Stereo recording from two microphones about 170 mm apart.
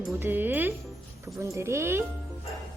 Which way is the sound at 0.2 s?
10° right (ahead or behind).